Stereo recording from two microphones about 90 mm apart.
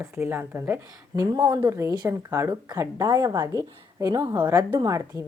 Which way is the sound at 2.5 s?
45° right (ahead or behind).